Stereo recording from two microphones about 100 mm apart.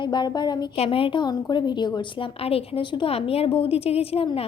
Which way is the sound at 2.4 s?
75° left (ahead or behind).